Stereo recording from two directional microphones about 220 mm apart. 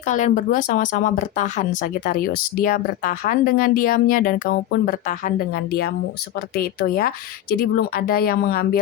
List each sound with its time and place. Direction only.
0.0 s speech: 35° left (ahead or behind)